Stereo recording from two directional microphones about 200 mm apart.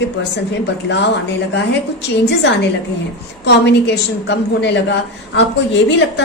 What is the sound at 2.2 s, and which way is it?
A woman's voice, 60° left (ahead or behind).